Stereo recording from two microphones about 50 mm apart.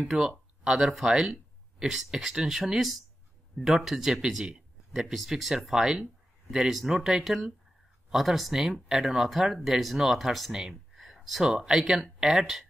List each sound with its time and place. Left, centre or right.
0.1 s speech: right
0.7 s speech: centre
10.5 s gasp: centre
11.5 s speech: centre